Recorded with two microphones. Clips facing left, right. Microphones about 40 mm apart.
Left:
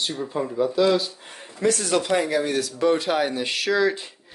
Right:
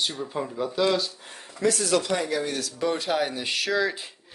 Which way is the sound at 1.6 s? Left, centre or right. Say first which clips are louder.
Left 2 dB; left.